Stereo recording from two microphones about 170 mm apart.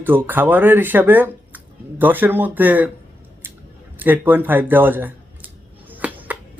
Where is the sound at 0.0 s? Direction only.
10° right (ahead or behind).